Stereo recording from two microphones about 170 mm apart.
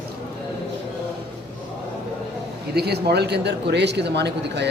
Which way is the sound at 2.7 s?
70° right (ahead or behind).